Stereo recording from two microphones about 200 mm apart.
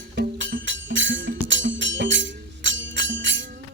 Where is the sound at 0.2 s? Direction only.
60° right (ahead or behind).